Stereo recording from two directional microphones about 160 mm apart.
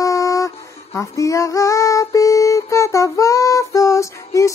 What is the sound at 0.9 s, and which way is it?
Music, 20° left (ahead or behind).